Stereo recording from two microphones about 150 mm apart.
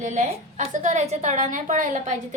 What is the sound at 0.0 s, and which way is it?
A woman's voice, 55° right (ahead or behind).